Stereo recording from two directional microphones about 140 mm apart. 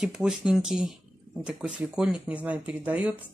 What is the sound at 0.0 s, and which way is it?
Speech, 5° right (ahead or behind).